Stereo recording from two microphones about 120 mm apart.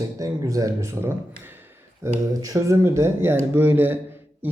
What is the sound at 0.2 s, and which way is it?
Speech, 30° right (ahead or behind).